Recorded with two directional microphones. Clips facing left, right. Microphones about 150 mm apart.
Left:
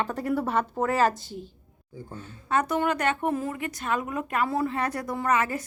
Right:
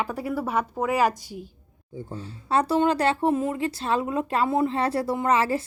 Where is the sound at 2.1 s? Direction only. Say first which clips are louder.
Right 3 dB; 30° right (ahead or behind).